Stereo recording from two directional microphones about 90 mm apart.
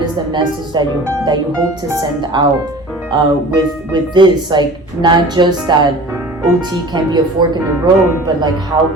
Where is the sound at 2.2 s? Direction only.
55° right (ahead or behind).